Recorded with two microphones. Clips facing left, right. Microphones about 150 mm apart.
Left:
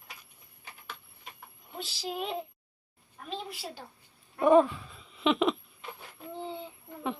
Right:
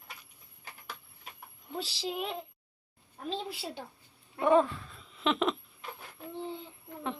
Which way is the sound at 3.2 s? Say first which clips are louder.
Right 2 dB; 30° right (ahead or behind).